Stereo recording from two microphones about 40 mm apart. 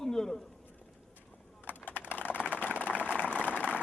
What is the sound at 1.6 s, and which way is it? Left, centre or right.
Typing, left.